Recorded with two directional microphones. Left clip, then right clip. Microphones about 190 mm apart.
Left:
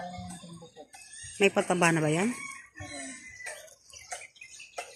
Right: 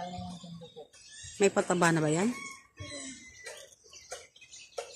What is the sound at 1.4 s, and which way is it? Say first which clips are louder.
Speech: left 2 dB; 10° left (ahead or behind).